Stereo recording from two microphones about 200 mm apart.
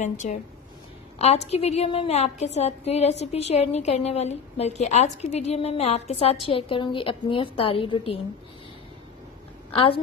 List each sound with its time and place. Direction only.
0.0 s a woman's voice: 35° left (ahead or behind)
9.7 s a woman's voice: 25° left (ahead or behind)